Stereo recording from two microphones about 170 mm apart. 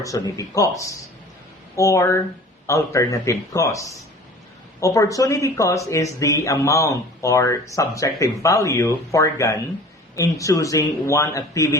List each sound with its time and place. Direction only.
0.0 s speech: 20° left (ahead or behind)